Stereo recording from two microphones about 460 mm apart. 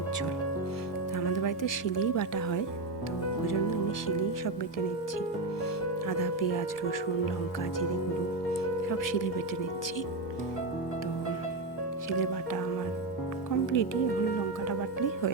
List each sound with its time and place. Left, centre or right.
1.3 s speech: left
4.0 s speech: left
6.1 s speech: left
8.9 s speech: left
13.7 s speech: left
14.7 s music: left